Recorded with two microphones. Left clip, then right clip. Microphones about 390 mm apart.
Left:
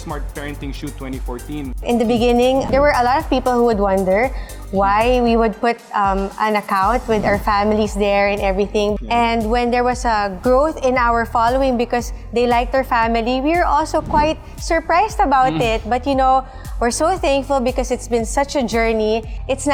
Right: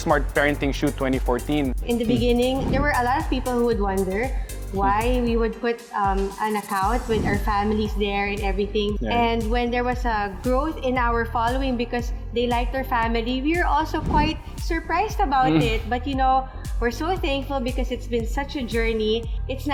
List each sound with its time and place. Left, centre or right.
0.1 s speech: right
1.9 s a woman's voice: left
18.9 s a woman's voice: left